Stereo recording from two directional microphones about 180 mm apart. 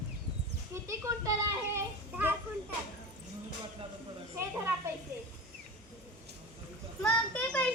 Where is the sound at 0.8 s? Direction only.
15° right (ahead or behind).